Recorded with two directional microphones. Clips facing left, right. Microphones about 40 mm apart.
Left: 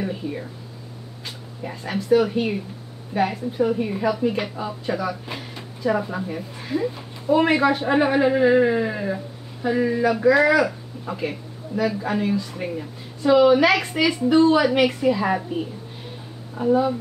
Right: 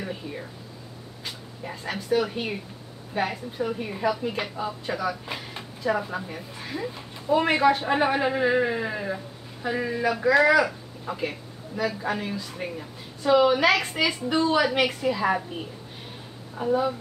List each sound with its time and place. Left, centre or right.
0.0 s a woman's voice: centre
16.5 s a woman's voice: centre